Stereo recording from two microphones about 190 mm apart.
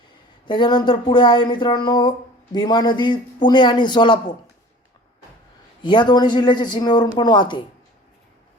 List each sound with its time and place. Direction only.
0.4 s speech: 25° left (ahead or behind)
5.8 s speech: 25° left (ahead or behind)